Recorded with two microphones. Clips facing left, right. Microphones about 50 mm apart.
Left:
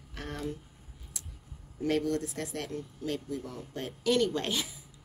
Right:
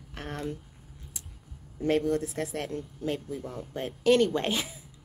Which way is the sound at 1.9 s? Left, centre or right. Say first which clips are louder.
Right 3 dB; centre.